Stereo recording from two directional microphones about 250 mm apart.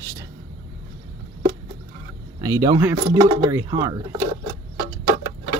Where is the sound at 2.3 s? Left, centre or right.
Centre.